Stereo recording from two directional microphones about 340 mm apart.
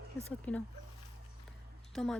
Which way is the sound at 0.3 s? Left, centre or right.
Centre.